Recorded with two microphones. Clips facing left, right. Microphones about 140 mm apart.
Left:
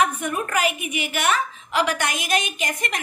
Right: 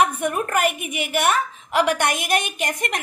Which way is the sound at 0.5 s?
55° right (ahead or behind).